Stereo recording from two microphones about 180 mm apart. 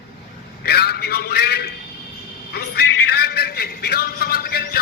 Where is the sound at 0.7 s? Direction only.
60° left (ahead or behind).